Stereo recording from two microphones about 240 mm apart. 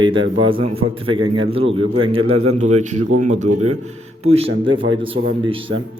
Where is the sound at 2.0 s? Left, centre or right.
Right.